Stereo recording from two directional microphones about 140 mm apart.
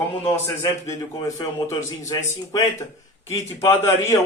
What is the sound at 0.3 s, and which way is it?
Speech, 20° left (ahead or behind).